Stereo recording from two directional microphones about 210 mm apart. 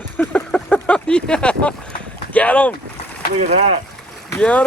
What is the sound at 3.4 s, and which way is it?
Speech, 30° right (ahead or behind).